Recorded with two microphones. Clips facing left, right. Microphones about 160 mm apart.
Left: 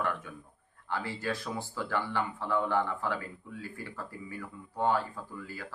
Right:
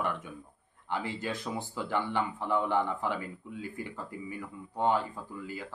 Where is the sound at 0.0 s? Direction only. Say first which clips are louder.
Even; 20° right (ahead or behind).